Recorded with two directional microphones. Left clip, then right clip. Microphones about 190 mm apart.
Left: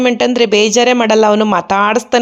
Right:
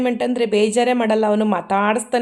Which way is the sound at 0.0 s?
25° left (ahead or behind).